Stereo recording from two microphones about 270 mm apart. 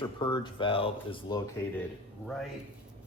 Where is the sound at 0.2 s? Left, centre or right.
Centre.